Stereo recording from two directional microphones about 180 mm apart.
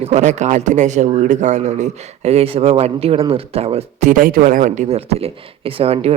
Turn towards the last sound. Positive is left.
turn(degrees=-35)  # may be behind; listen again after turning